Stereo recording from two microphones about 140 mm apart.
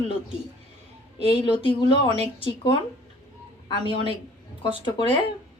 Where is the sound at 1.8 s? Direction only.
35° left (ahead or behind).